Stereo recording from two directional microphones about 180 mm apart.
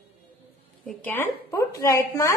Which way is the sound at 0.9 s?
10° left (ahead or behind).